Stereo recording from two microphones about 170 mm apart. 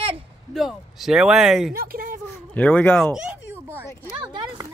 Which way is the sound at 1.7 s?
60° right (ahead or behind).